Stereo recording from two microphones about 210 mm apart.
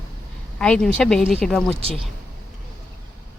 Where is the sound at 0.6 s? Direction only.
5° left (ahead or behind).